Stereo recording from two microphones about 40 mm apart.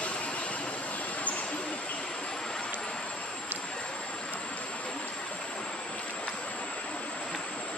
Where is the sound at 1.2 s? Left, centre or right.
Left.